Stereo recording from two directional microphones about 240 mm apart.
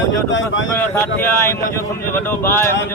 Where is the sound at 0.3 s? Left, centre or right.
Left.